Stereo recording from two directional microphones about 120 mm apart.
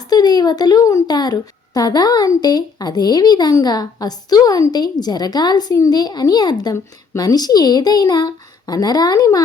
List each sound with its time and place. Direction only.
0.1 s a woman's voice: 35° left (ahead or behind)